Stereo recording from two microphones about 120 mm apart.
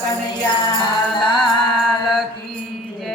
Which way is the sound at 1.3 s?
Centre (ahead or behind).